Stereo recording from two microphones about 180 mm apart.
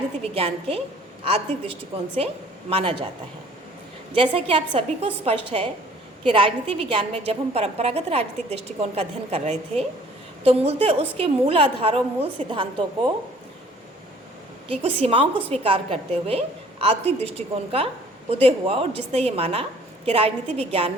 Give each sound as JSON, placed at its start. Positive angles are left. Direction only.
{"t": 0.3, "sound": "a woman's voice", "side_deg": -35}
{"t": 4.1, "sound": "a woman's voice", "side_deg": -30}
{"t": 14.7, "sound": "a woman's voice", "side_deg": -35}